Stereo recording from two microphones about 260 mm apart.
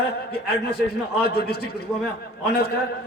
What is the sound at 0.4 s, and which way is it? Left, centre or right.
A man's voice, left.